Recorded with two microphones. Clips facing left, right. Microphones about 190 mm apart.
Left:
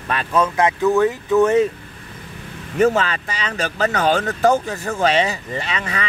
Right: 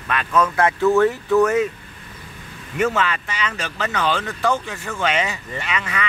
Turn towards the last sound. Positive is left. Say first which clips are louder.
# left 1 dB
turn(degrees=35)  # may be behind; listen again after turning